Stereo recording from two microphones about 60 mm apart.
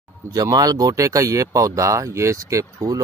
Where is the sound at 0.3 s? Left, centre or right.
Right.